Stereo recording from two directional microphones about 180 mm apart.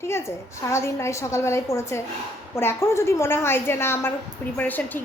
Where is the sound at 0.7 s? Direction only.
15° left (ahead or behind).